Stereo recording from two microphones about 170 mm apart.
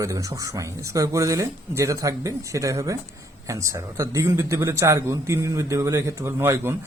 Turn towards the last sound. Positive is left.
turn(degrees=-15)  # may be behind; listen again after turning